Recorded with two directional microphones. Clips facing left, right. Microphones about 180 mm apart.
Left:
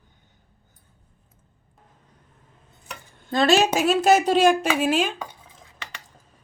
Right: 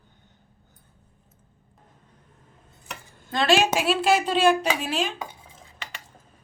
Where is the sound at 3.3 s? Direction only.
40° left (ahead or behind).